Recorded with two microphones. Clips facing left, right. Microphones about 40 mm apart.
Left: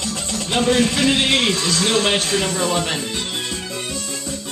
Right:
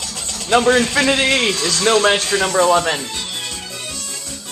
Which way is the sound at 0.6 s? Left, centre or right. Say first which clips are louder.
Left 1 dB; centre.